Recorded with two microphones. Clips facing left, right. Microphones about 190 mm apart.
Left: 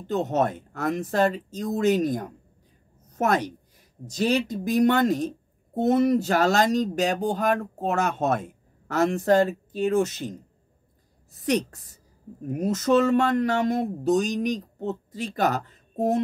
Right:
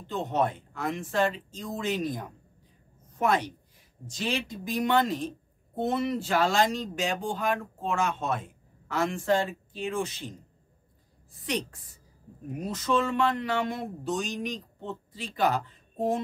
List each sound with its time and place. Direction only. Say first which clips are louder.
0.0 s a woman's voice: left 4 dB; 45° left (ahead or behind)
11.4 s speech: left 8 dB; 45° left (ahead or behind)